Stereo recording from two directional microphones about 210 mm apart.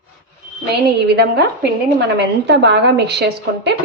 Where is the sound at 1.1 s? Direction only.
55° right (ahead or behind).